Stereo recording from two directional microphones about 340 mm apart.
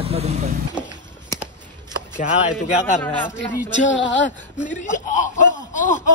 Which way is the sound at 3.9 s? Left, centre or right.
Left.